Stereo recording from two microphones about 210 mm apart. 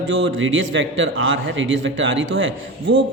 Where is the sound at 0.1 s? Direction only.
65° right (ahead or behind).